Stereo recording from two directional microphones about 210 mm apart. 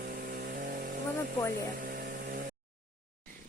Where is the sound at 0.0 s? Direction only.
45° right (ahead or behind).